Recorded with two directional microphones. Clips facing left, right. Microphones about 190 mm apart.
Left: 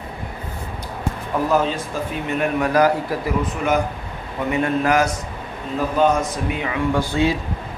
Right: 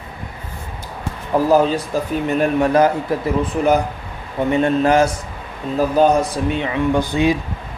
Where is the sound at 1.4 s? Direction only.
30° right (ahead or behind).